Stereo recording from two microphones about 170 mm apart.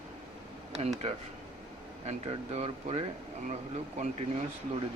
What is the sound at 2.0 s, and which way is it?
Speech, 40° right (ahead or behind).